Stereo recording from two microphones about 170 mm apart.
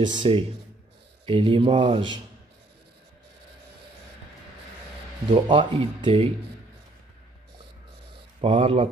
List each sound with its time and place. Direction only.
0.0 s speech: 30° right (ahead or behind)
5.5 s speech: 30° right (ahead or behind)
8.4 s speech: 30° right (ahead or behind)